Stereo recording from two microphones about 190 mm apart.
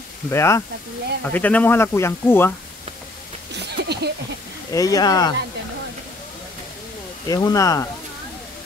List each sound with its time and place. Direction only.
0.3 s speech: 15° left (ahead or behind)
3.5 s a sound: 60° right (ahead or behind)
4.7 s speech: 20° left (ahead or behind)
7.2 s speech: 20° left (ahead or behind)